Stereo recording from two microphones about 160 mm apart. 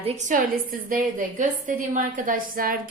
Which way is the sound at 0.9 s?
55° right (ahead or behind).